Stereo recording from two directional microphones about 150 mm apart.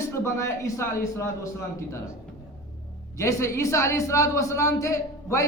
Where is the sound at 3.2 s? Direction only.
20° left (ahead or behind).